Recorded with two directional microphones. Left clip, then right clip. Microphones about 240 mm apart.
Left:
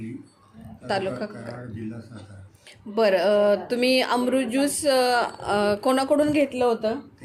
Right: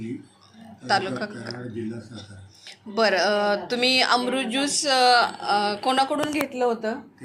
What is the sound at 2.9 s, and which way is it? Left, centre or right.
Speech, left.